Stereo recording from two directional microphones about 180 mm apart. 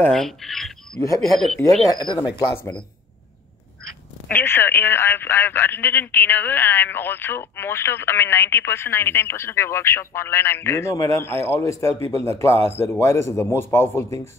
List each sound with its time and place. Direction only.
0.0 s speech: 5° left (ahead or behind)
1.9 s speech: 20° left (ahead or behind)
4.3 s speech: 10° left (ahead or behind)